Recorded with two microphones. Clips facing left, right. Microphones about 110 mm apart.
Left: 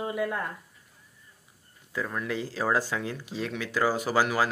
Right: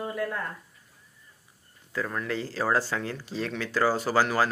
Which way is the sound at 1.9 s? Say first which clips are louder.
Right 1 dB; 10° left (ahead or behind).